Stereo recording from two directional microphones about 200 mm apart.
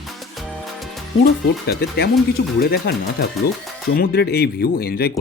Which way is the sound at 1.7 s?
55° left (ahead or behind).